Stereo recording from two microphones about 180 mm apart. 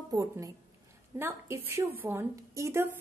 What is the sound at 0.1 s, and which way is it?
A woman's voice, 20° right (ahead or behind).